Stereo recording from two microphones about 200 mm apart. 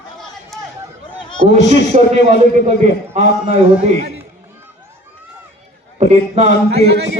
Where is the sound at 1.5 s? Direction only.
35° right (ahead or behind).